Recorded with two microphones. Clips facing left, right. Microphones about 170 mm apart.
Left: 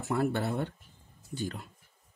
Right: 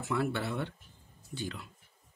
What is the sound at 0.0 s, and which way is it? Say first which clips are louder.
Speech: left 3 dB; 45° left (ahead or behind).